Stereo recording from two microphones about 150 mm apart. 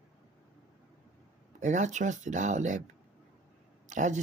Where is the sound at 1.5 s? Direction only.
55° right (ahead or behind).